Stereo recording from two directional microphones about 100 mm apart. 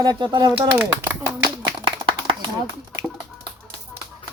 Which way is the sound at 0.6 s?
20° right (ahead or behind).